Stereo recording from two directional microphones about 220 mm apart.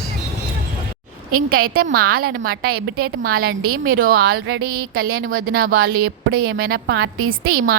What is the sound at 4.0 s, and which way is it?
A woman's voice, 40° right (ahead or behind).